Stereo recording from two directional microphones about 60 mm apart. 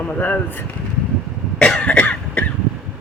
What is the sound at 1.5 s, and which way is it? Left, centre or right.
Cough, left.